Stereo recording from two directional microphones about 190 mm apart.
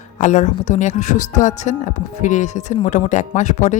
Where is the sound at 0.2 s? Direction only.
40° left (ahead or behind).